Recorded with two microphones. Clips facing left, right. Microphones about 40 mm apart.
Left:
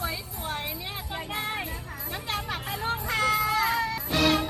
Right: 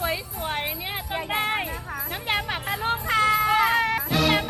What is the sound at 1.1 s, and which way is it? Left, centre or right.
Music, right.